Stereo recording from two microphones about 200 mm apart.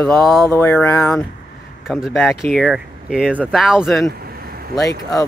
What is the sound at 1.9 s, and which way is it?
Speech, centre (ahead or behind).